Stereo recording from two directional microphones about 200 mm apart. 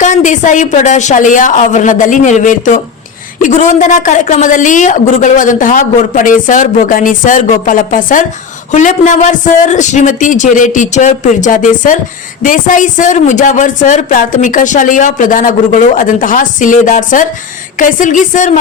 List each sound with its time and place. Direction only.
0.0 s speech: 40° left (ahead or behind)